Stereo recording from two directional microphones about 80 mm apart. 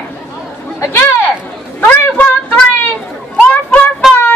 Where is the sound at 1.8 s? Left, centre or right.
Centre.